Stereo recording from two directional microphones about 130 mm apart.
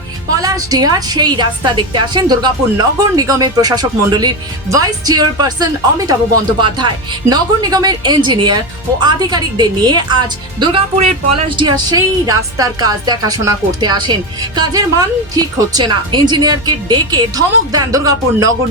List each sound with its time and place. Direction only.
0.4 s a woman's voice: 30° right (ahead or behind); by 11.4 s 50° right (ahead or behind)
11.4 s a woman's voice: 40° right (ahead or behind)